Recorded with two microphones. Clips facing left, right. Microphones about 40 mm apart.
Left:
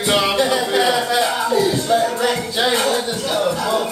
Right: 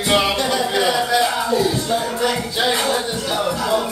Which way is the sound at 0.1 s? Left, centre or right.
Centre.